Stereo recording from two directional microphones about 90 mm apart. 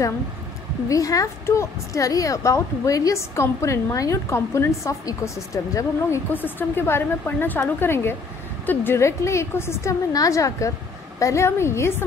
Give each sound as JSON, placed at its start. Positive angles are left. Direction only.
{"t": 0.8, "sound": "a woman's voice", "side_deg": 40}